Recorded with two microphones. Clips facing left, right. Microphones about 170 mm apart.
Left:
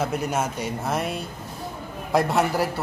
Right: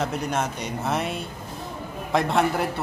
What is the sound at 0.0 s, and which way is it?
Speech, 5° left (ahead or behind).